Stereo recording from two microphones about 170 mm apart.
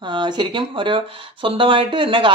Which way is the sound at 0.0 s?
25° right (ahead or behind).